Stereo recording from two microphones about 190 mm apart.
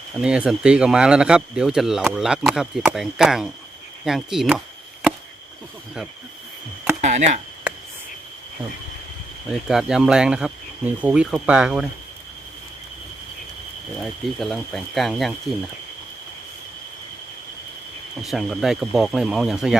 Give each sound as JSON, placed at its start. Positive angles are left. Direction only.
{"t": 0.2, "sound": "speech", "side_deg": -5}
{"t": 7.0, "sound": "chop", "side_deg": -40}
{"t": 9.5, "sound": "speech", "side_deg": 0}
{"t": 13.9, "sound": "speech", "side_deg": 0}
{"t": 18.2, "sound": "speech", "side_deg": 0}